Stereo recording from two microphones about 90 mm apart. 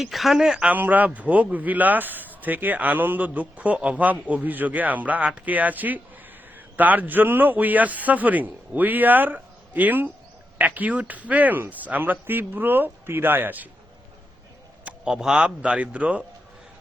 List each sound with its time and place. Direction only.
0.0 s a man's voice: centre (ahead or behind); by 13.7 s 20° right (ahead or behind)
14.8 s a man's voice: 5° right (ahead or behind)